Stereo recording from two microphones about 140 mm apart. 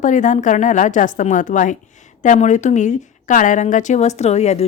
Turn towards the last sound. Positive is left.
turn(degrees=50)  # may be behind; listen again after turning